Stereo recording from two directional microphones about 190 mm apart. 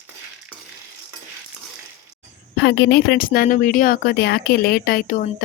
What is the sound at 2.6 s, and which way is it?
Speech, 65° left (ahead or behind).